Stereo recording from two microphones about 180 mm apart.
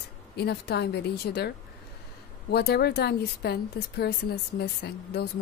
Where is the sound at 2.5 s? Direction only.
60° left (ahead or behind).